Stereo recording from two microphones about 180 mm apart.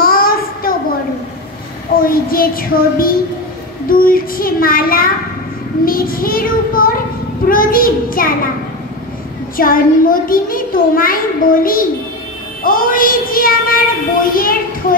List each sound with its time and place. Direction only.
0.0 s child singing: 55° left (ahead or behind)
2.0 s a child's voice: 55° left (ahead or behind)
9.6 s a child's voice: 50° left (ahead or behind)